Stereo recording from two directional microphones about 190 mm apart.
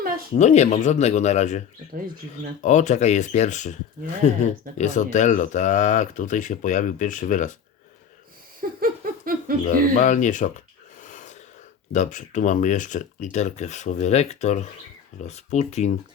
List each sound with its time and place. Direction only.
0.3 s speech: 35° left (ahead or behind)
2.6 s speech: 40° left (ahead or behind)
8.8 s a sound: 50° right (ahead or behind)
9.6 s speech: 40° left (ahead or behind)
11.0 s gasp: 40° left (ahead or behind)
11.9 s speech: 40° left (ahead or behind)